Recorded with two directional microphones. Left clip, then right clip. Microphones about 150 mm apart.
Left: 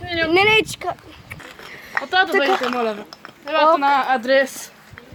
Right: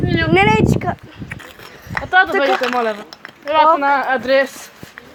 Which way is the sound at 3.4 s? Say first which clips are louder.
Right 3 dB; 75° left (ahead or behind).